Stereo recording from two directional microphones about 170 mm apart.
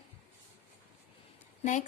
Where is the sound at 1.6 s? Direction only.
45° left (ahead or behind).